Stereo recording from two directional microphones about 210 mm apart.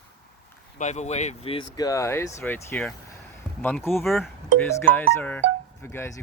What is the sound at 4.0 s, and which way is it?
Speech, centre (ahead or behind).